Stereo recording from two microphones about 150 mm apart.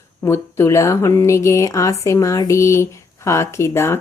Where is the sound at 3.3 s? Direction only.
20° left (ahead or behind).